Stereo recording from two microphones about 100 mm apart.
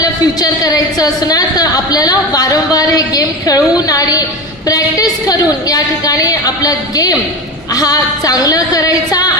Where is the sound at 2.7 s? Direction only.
40° left (ahead or behind).